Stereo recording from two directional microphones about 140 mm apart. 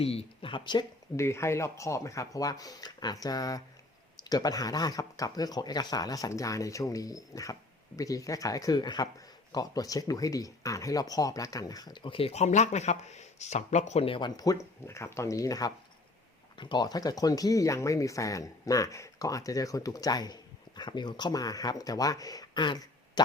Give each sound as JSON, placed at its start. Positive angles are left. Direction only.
{"t": 0.0, "sound": "speech", "side_deg": 45}
{"t": 1.1, "sound": "speech", "side_deg": 20}